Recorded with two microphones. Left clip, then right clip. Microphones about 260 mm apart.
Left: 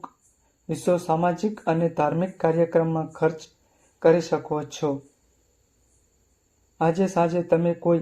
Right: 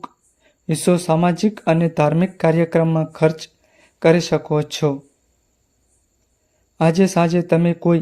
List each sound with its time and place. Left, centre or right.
0.7 s speech: right
7.0 s speech: right